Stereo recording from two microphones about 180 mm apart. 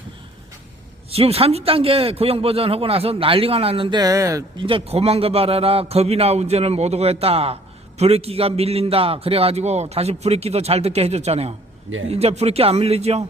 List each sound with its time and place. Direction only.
1.1 s a man's voice: 35° right (ahead or behind); by 4.6 s 20° right (ahead or behind)
4.6 s a man's voice: 30° right (ahead or behind)